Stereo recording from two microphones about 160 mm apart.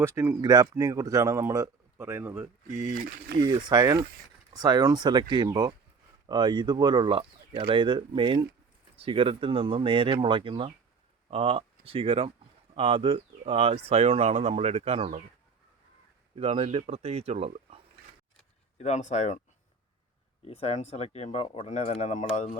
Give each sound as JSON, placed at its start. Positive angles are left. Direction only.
{"t": 0.0, "sound": "speech", "side_deg": -15}
{"t": 0.4, "sound": "a man's voice", "side_deg": -25}
{"t": 3.4, "sound": "a man's voice", "side_deg": -25}
{"t": 16.4, "sound": "speech", "side_deg": -40}
{"t": 18.8, "sound": "speech", "side_deg": 45}
{"t": 20.4, "sound": "speech", "side_deg": 40}